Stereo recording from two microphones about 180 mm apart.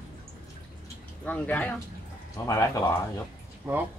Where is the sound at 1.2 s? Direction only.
10° left (ahead or behind).